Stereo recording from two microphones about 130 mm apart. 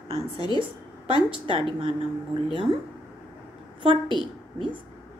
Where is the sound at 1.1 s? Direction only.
40° right (ahead or behind).